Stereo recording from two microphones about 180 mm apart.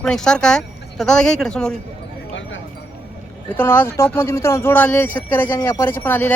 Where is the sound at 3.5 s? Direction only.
10° left (ahead or behind).